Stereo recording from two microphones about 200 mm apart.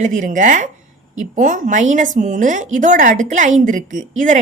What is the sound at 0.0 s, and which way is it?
A woman's voice, 40° right (ahead or behind).